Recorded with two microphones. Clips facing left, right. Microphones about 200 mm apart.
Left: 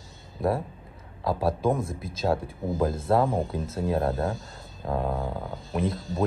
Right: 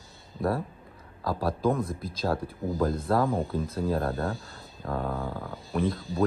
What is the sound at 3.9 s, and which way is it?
Speech, 30° left (ahead or behind).